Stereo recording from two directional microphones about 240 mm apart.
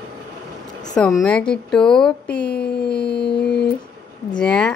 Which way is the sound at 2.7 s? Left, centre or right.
Left.